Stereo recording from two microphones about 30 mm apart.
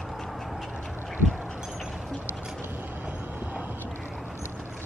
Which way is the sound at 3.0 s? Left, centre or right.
Right.